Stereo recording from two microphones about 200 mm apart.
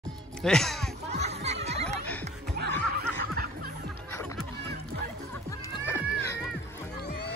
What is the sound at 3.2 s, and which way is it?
Music, 45° right (ahead or behind).